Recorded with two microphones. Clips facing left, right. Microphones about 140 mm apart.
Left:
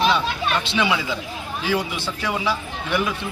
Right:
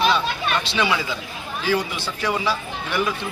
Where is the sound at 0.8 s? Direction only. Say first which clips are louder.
Left 1 dB; 10° left (ahead or behind).